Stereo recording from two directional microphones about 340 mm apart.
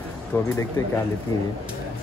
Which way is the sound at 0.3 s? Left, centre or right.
Centre.